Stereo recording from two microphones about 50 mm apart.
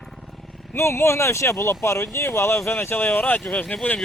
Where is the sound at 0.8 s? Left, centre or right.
Left.